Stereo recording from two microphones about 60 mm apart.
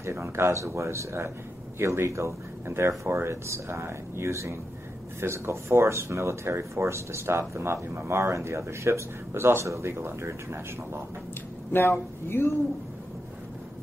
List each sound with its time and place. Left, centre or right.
0.0 s speech: right
11.7 s speech: left